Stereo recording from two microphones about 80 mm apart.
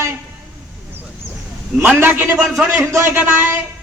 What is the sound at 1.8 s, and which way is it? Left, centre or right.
Speech, right.